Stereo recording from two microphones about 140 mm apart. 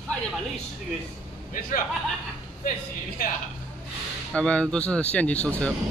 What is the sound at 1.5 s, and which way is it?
Speech, 85° left.